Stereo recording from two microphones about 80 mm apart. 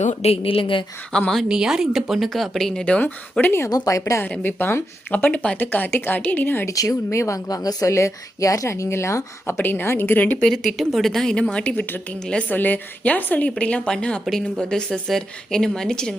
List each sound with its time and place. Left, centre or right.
0.4 s a woman's voice: left
1.1 s a woman's voice: centre
1.5 s speech: centre
2.8 s speech: centre
3.7 s speech: left
4.3 s speech: left
5.1 s speech: centre
6.7 s speech: left
10.4 s speech: centre
11.5 s a woman's voice: centre
14.3 s a woman's voice: centre